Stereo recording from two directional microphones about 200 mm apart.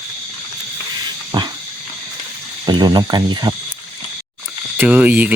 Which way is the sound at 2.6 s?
20° right (ahead or behind).